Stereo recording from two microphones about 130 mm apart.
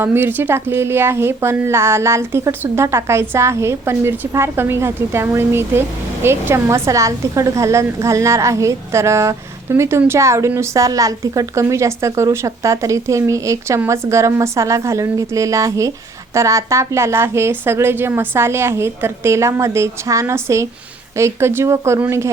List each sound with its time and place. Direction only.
0.0 s a woman's voice: 15° right (ahead or behind)